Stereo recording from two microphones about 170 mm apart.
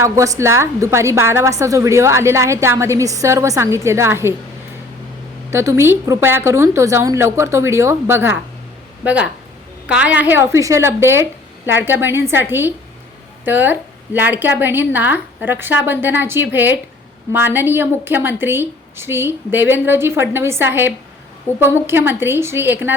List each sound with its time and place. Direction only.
0.0 s a woman's voice: 15° right (ahead or behind)
5.5 s a woman's voice: 15° right (ahead or behind)
9.8 s a woman's voice: 5° right (ahead or behind)